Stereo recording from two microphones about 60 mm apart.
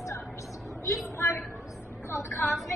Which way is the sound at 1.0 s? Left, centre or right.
Left.